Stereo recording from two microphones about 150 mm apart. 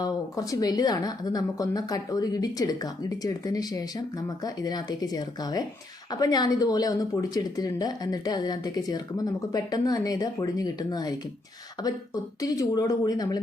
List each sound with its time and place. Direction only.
0.0 s speech: 25° left (ahead or behind)
12.4 s speech: 25° left (ahead or behind)